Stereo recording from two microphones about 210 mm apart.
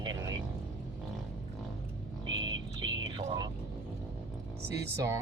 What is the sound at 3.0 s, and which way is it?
Vehicle, 20° right (ahead or behind).